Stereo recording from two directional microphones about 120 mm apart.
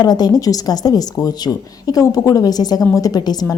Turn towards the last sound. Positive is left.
turn(degrees=35)  # may be behind; listen again after turning